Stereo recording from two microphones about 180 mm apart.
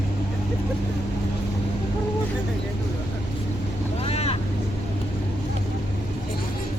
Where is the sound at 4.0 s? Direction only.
35° left (ahead or behind).